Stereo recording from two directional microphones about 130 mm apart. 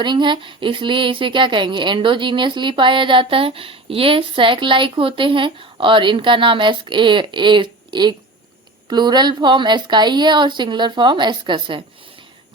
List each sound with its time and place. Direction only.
0.0 s a woman's voice: 35° right (ahead or behind)